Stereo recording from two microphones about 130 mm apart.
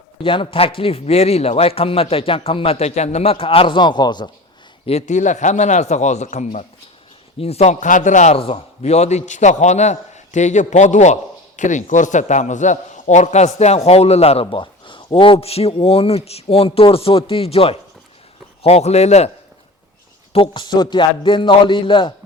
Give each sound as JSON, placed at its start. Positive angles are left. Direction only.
{"t": 0.2, "sound": "a man's voice", "side_deg": 40}
{"t": 4.9, "sound": "a man's voice", "side_deg": 60}
{"t": 7.3, "sound": "a man's voice", "side_deg": 50}
{"t": 8.4, "sound": "a man's voice", "side_deg": 50}
{"t": 14.4, "sound": "a man's voice", "side_deg": 40}
{"t": 20.3, "sound": "a man's voice", "side_deg": 40}